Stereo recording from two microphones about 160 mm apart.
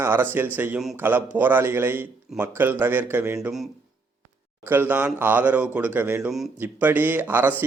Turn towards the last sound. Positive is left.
turn(degrees=-15)  # may be behind; listen again after turning